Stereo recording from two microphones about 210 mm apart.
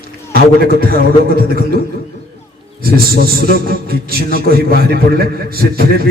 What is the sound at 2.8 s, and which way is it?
A man's voice, 45° right (ahead or behind).